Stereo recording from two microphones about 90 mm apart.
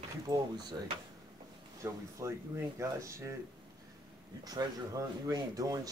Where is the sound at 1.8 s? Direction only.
35° right (ahead or behind).